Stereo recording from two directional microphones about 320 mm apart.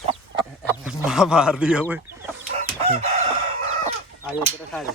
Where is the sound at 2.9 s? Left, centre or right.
Centre.